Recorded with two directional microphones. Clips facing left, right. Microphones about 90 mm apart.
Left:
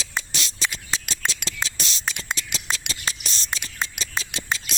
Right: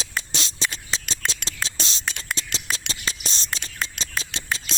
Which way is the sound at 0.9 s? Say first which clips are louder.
Left 1 dB; 20° left (ahead or behind).